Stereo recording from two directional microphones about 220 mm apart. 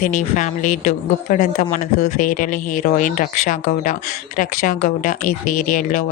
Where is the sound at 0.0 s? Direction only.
35° left (ahead or behind).